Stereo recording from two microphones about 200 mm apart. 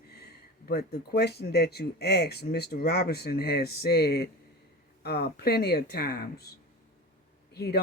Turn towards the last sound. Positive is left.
turn(degrees=55)  # may be behind; listen again after turning